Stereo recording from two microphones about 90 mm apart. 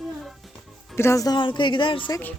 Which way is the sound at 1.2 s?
55° left (ahead or behind).